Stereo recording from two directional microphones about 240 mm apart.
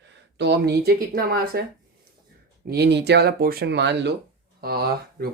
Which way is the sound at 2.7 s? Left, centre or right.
Right.